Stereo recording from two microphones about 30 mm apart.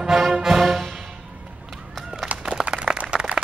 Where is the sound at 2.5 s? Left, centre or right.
Right.